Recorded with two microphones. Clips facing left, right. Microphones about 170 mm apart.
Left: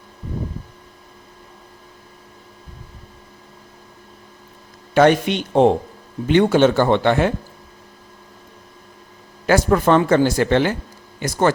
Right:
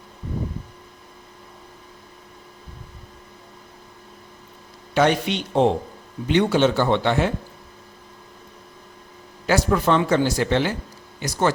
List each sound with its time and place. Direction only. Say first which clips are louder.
4.9 s speech: left 5 dB; 50° left (ahead or behind)
9.5 s speech: left 4 dB; 50° left (ahead or behind)